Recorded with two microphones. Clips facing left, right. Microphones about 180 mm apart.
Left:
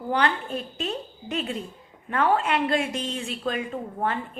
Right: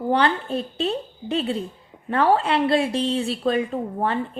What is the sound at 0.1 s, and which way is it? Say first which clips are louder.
A woman's voice: right 4 dB; 30° right (ahead or behind).